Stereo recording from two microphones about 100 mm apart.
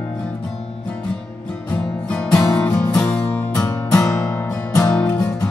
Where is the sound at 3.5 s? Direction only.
30° left (ahead or behind).